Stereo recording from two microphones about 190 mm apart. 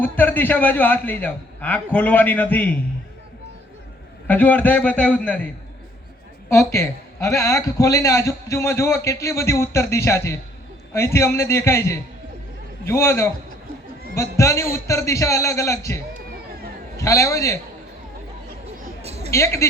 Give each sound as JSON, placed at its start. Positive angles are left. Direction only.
{"t": 0.0, "sound": "a man's voice", "side_deg": 10}
{"t": 4.3, "sound": "a man's voice", "side_deg": 10}
{"t": 6.5, "sound": "a man's voice", "side_deg": 15}
{"t": 17.0, "sound": "a man's voice", "side_deg": 15}
{"t": 19.0, "sound": "a sound", "side_deg": -35}
{"t": 19.3, "sound": "a man's voice", "side_deg": 15}